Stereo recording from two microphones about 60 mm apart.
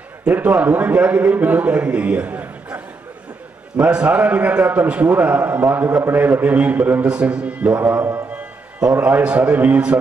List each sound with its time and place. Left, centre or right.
0.3 s a man's voice: right
3.9 s a man's voice: centre
7.8 s music: right
8.9 s a man's voice: right